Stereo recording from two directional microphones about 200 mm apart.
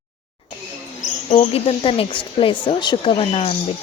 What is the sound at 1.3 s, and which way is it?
Speech, 30° left (ahead or behind).